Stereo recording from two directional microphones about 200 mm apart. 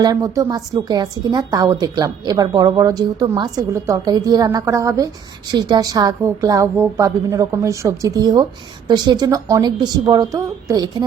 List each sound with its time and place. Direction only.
0.0 s a woman's voice: 15° right (ahead or behind)